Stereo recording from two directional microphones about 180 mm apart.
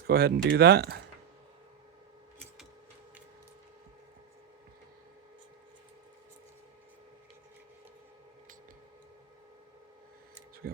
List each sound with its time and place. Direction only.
0.1 s speech: 60° right (ahead or behind)